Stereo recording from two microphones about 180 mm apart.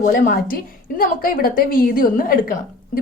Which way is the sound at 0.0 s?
50° left (ahead or behind).